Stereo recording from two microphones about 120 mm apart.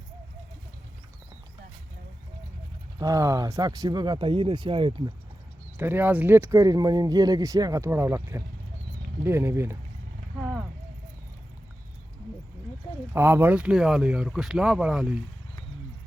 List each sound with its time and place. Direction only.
3.0 s speech: 30° right (ahead or behind); by 5.1 s 45° right (ahead or behind)
5.7 s speech: 15° right (ahead or behind)
13.1 s speech: 20° right (ahead or behind)